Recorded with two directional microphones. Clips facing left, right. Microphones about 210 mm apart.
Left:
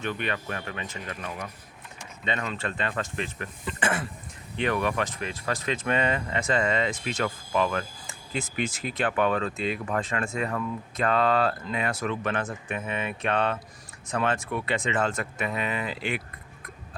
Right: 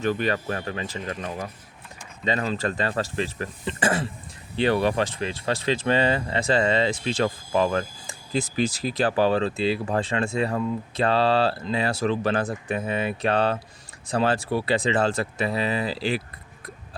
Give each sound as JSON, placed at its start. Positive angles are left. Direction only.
{"t": 0.0, "sound": "speech", "side_deg": -35}